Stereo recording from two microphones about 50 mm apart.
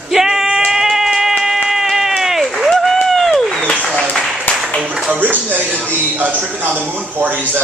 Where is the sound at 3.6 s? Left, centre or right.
Left.